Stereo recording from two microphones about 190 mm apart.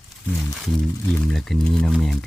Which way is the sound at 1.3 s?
Centre (ahead or behind).